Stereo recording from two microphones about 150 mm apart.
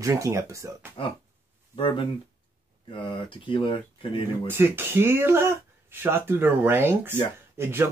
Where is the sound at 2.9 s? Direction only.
35° left (ahead or behind).